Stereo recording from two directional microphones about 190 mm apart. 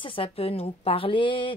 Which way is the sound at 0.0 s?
30° left (ahead or behind).